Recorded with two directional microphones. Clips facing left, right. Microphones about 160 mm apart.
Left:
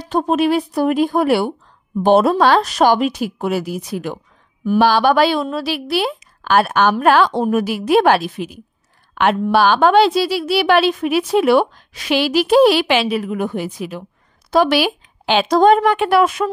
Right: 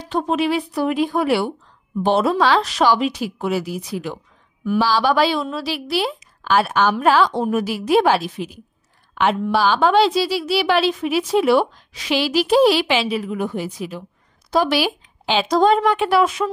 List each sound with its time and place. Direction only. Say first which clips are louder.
0.1 s a woman's voice: left 4 dB; 45° left (ahead or behind)